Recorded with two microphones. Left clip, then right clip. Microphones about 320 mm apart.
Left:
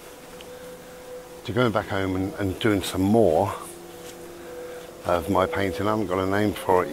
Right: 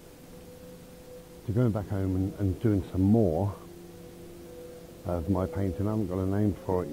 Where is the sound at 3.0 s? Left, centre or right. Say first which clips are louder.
Left 8 dB; left.